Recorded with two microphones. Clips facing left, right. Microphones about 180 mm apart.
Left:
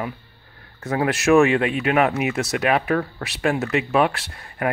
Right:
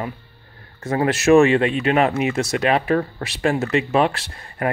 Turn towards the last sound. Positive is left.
turn(degrees=5)  # may be behind; listen again after turning